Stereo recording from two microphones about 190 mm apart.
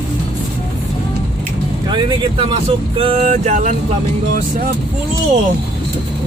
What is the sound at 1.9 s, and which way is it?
Vehicle, 25° right (ahead or behind).